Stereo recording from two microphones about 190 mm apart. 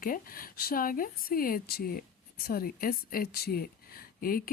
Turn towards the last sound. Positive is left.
turn(degrees=50)  # may be behind; listen again after turning